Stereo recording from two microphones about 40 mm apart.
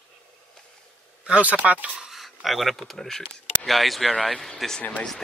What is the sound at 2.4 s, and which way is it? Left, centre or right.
Speech, centre.